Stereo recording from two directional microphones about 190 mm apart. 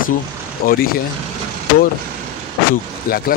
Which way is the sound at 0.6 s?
50° left (ahead or behind).